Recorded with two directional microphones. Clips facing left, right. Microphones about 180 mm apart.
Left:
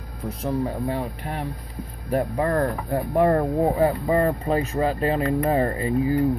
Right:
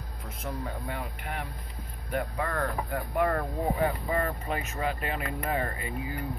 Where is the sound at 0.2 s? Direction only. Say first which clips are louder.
Left 11 dB; 35° left (ahead or behind).